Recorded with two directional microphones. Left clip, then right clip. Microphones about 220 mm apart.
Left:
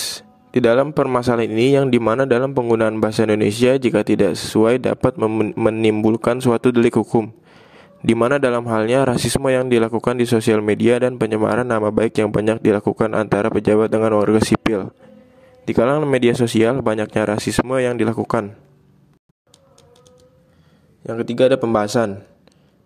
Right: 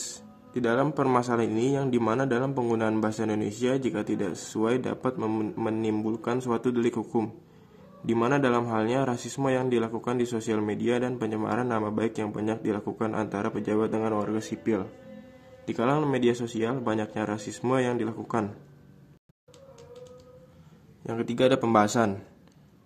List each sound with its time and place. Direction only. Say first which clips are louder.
0.5 s speech: left 11 dB; 40° left (ahead or behind)
21.0 s a man's voice: left 9 dB; 25° left (ahead or behind)